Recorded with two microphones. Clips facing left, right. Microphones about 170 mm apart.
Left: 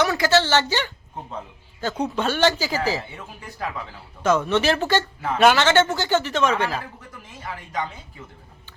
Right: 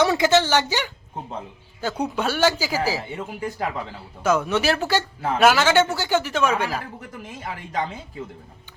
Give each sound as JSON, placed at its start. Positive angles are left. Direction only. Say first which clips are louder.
{"t": 0.0, "sound": "a woman's voice", "louder": "right 2 dB", "side_deg": -20}
{"t": 4.2, "sound": "speech", "louder": "left 1 dB", "side_deg": -10}